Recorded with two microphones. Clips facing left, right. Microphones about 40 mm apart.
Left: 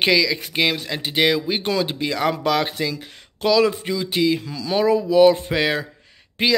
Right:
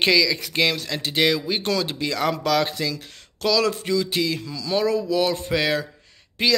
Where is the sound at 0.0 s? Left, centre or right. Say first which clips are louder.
Left 1 dB; centre.